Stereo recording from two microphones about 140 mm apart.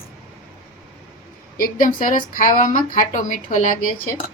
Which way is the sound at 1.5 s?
85° left.